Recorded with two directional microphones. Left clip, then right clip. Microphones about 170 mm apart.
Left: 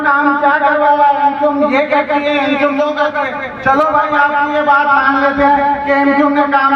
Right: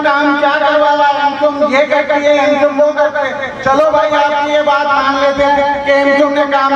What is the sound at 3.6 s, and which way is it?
Speech, 25° right (ahead or behind).